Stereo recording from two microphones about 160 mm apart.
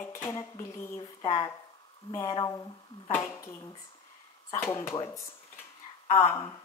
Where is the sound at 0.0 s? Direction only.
15° left (ahead or behind).